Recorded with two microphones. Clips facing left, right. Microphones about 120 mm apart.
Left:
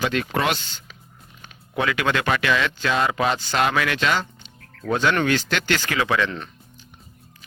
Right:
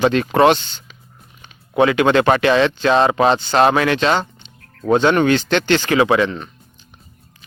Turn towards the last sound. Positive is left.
turn(degrees=-25)  # may be behind; listen again after turning